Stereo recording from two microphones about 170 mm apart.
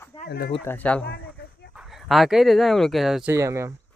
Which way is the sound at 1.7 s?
5° right (ahead or behind).